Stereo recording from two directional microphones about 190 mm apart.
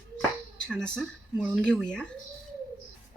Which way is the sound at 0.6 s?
5° left (ahead or behind).